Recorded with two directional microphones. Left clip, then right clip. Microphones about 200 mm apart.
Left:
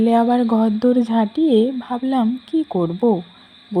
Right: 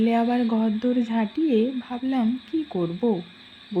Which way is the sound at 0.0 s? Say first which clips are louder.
Left 7 dB; 25° left (ahead or behind).